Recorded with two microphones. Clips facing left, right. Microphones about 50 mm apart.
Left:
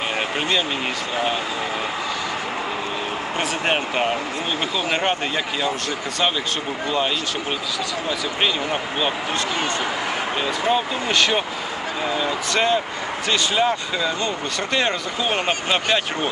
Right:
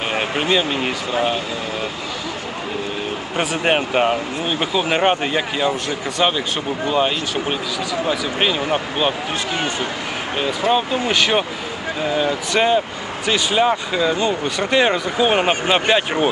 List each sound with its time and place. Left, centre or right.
0.2 s a sound: centre
1.1 s speech: centre
3.3 s speech: centre
6.8 s speech: centre
10.3 s speech: centre
11.1 s speech: centre